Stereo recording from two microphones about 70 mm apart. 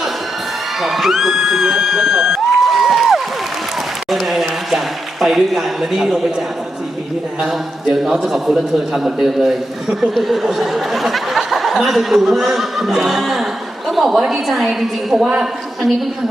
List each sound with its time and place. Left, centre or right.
0.8 s speech: centre
4.1 s a sound: centre
5.2 s speech: centre
7.4 s speech: centre